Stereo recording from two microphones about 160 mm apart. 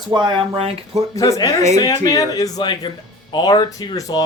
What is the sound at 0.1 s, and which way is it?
Speech, 30° right (ahead or behind).